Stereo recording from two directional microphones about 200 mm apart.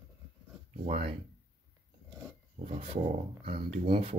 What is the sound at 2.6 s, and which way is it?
Speech, 30° right (ahead or behind).